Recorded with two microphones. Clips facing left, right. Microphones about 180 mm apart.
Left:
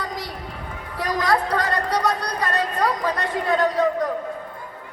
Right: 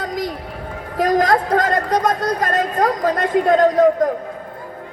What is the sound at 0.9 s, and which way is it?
A woman's voice, 45° right (ahead or behind).